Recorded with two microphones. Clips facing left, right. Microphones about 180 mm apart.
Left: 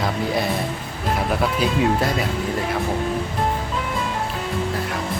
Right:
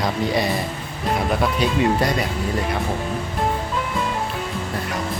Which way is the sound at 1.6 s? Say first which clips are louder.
Even; centre (ahead or behind).